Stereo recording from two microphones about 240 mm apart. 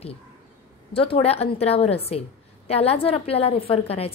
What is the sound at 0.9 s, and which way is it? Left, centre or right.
A woman's voice, left.